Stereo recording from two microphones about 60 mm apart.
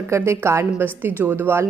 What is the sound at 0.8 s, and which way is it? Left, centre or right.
Speech, right.